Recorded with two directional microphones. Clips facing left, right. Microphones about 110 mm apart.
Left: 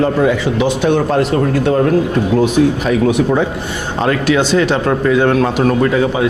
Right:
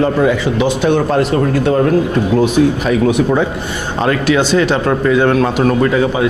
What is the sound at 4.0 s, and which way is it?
Speech, 20° right (ahead or behind).